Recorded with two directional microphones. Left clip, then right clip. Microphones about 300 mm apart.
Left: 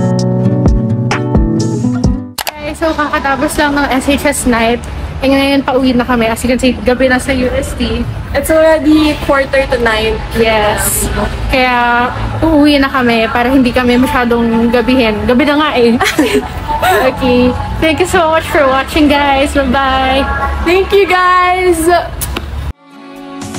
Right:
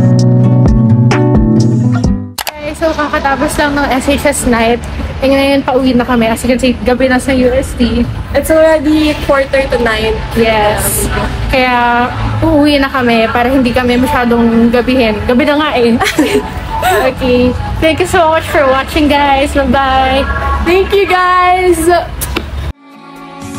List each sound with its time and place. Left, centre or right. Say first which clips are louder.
0.1 s music: right 2 dB; centre
2.8 s a woman's voice: right 1 dB; centre
8.3 s a woman's voice: right 1 dB; centre
10.4 s a woman's voice: right 1 dB; centre
16.0 s a woman's voice: even; centre
17.0 s a woman's voice: even; centre
20.6 s a woman's voice: left 1 dB; centre